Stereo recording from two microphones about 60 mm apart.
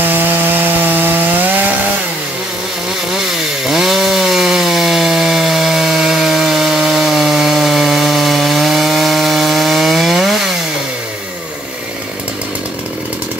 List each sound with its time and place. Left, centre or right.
0.0 s wood: right
3.6 s chainsaw: centre